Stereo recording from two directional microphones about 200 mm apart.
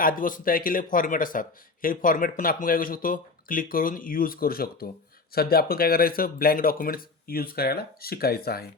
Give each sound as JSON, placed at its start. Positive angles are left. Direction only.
{"t": 0.0, "sound": "speech", "side_deg": 45}